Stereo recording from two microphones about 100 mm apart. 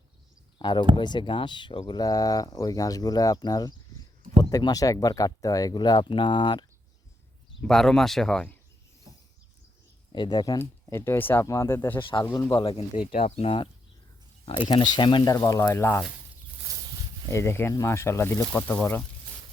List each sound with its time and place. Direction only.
0.6 s speech: 50° left (ahead or behind)
1.9 s speech: 40° left (ahead or behind)
7.6 s speech: 5° left (ahead or behind)
10.1 s speech: 45° left (ahead or behind)
10.9 s speech: 25° left (ahead or behind)
11.9 s speech: 55° left (ahead or behind)
13.1 s speech: 90° left; by 13.7 s 70° left (ahead or behind)
14.4 s speech: 55° left (ahead or behind); by 16.0 s 25° left (ahead or behind)
17.3 s speech: 25° left (ahead or behind)